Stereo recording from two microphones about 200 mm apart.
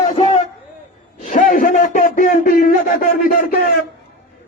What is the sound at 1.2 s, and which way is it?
A man's voice, 40° left (ahead or behind).